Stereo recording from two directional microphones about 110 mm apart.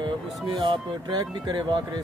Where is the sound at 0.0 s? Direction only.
45° right (ahead or behind).